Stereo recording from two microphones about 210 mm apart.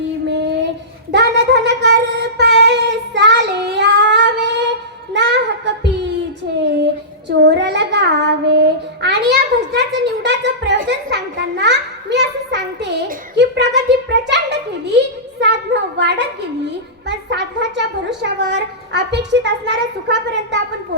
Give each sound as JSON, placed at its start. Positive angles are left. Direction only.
{"t": 0.3, "sound": "a sound", "side_deg": -55}
{"t": 1.1, "sound": "child singing", "side_deg": -55}
{"t": 5.1, "sound": "music", "side_deg": -55}
{"t": 7.3, "sound": "child singing", "side_deg": -55}
{"t": 10.2, "sound": "a sound", "side_deg": -55}
{"t": 17.1, "sound": "a child's voice", "side_deg": -55}